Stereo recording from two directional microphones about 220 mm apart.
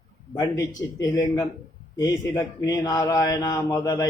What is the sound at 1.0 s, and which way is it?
Speech, 15° left (ahead or behind).